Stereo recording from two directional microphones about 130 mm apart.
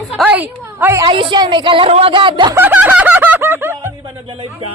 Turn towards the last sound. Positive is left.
turn(degrees=-20)  # may be behind; listen again after turning